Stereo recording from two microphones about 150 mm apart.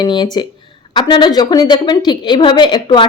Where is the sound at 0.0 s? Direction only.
30° left (ahead or behind).